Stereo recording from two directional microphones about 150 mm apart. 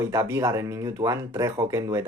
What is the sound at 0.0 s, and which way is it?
Speech, 20° right (ahead or behind).